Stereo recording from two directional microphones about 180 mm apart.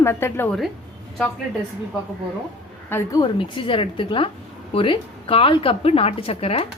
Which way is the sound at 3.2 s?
30° left (ahead or behind).